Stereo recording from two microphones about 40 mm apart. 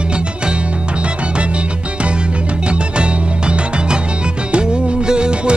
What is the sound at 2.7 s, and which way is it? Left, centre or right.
Music, right.